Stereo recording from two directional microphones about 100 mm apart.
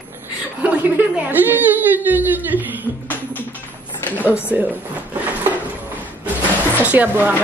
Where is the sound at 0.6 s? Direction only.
15° right (ahead or behind).